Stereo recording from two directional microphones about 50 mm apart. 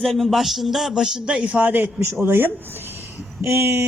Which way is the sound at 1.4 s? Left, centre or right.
Right.